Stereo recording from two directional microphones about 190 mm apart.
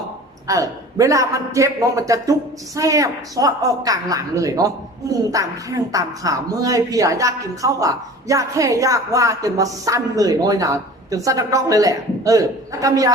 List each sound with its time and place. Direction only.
0.4 s speech: 15° right (ahead or behind)